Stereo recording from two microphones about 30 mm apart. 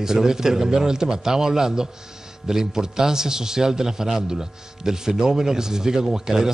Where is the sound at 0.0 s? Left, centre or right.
Centre.